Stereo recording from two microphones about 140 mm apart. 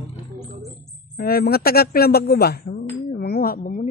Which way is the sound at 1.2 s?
90° left.